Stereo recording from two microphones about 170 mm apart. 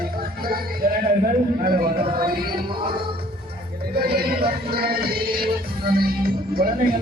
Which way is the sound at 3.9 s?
65° right (ahead or behind).